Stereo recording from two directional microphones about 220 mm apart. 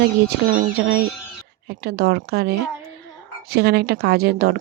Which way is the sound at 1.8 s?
45° right (ahead or behind).